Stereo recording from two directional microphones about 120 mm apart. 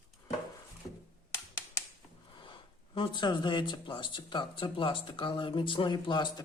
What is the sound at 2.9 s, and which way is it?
Speech, 40° left (ahead or behind).